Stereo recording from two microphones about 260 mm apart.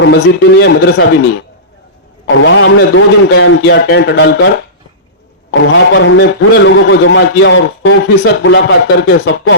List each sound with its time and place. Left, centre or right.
0.0 s a man's voice: left
5.5 s a man's voice: left